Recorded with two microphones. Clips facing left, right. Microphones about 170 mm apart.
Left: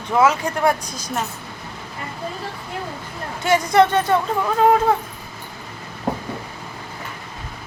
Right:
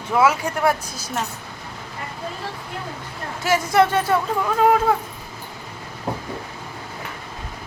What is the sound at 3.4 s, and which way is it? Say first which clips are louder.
Speech: left 2 dB; 5° right (ahead or behind).